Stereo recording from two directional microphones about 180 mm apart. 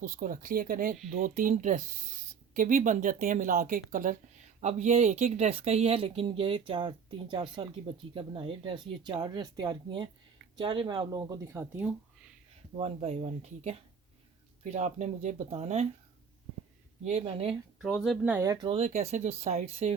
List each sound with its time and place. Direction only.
0.0 s speech: 50° right (ahead or behind); by 11.7 s 15° right (ahead or behind)
12.7 s speech: 35° right (ahead or behind)
17.0 s speech: 35° right (ahead or behind)
17.7 s speech: centre (ahead or behind)
18.4 s speech: 25° right (ahead or behind)
18.8 s speech: 35° right (ahead or behind)